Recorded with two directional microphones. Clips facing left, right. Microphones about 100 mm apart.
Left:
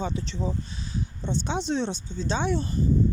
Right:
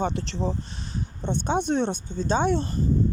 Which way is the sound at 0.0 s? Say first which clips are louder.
Right 3 dB; 65° right (ahead or behind).